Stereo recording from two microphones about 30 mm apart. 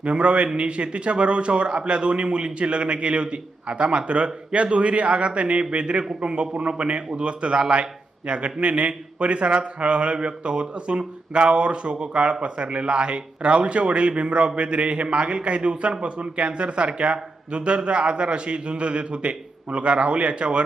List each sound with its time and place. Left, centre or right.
0.0 s a man's voice: right